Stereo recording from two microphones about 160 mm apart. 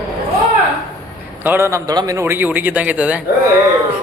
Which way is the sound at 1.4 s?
15° right (ahead or behind).